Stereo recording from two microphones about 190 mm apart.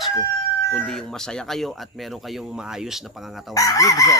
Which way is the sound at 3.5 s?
15° left (ahead or behind).